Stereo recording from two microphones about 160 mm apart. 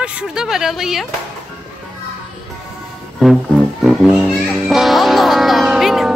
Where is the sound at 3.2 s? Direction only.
Centre (ahead or behind).